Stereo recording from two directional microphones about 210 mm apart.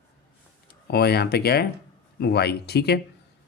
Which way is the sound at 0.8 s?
50° left (ahead or behind).